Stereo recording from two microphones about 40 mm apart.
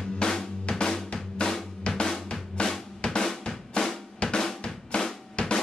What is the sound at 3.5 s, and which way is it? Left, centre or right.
Drum, centre.